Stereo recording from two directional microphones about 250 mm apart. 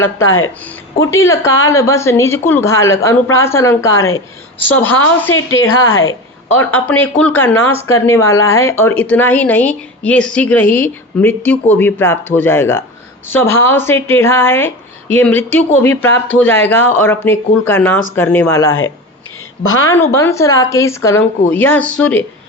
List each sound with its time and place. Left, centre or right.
0.3 s a woman's voice: left
1.1 s speech: centre
5.3 s a woman's voice: left
6.6 s speech: centre
19.6 s a woman's voice: left
19.9 s speech: centre